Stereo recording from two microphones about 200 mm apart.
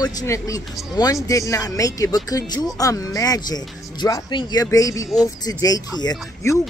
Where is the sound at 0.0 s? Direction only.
15° left (ahead or behind).